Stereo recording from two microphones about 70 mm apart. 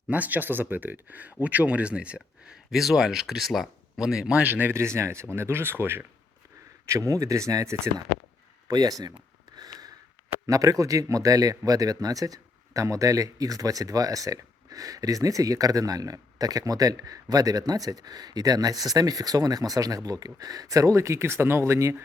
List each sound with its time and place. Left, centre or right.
0.1 s speech: right
4.4 s speech: right
4.7 s speech: right
6.8 s speech: right
8.7 s speech: right
9.6 s gasp: right
10.4 s speech: right